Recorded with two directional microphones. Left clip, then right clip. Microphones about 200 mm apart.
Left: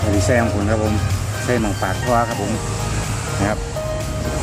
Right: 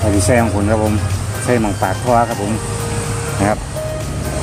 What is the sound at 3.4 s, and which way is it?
Speech, 40° right (ahead or behind).